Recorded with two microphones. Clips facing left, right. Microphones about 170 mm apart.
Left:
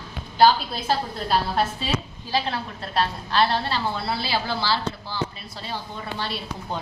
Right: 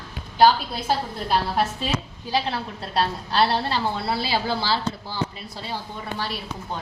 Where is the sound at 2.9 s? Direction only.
30° right (ahead or behind).